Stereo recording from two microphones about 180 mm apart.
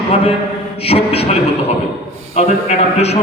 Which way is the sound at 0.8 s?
35° left (ahead or behind).